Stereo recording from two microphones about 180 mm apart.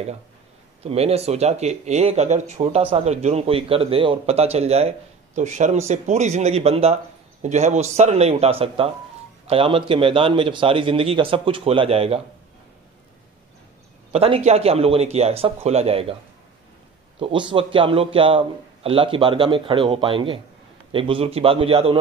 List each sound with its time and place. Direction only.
0.8 s a man's voice: 35° right (ahead or behind)
14.1 s speech: 35° right (ahead or behind)
17.2 s a man's voice: 25° right (ahead or behind)